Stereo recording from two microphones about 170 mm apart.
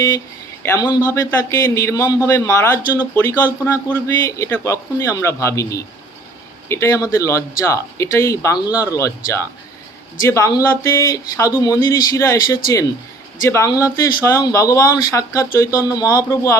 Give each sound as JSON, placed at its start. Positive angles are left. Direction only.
{"t": 0.6, "sound": "speech", "side_deg": 20}